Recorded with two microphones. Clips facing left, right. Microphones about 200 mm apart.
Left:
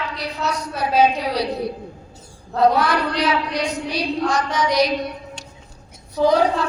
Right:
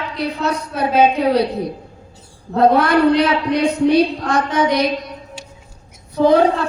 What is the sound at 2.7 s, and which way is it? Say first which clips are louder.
A woman's voice: right 8 dB; 55° right (ahead or behind).